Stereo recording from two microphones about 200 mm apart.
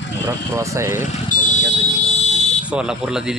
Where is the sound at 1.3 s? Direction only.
40° left (ahead or behind).